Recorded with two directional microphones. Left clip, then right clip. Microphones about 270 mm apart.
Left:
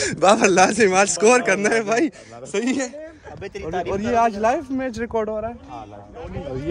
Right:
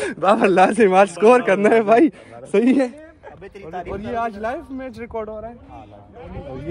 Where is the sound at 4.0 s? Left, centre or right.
Left.